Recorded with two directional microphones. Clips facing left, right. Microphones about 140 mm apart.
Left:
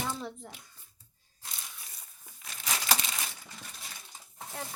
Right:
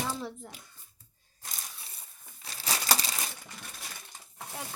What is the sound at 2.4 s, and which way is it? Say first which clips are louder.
Crushing: right 1 dB; 35° right (ahead or behind).